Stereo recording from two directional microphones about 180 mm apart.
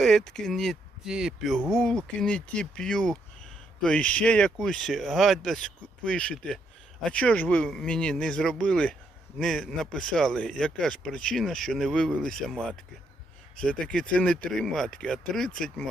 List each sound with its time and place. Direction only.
0.0 s speech: centre (ahead or behind)
13.6 s speech: 5° left (ahead or behind)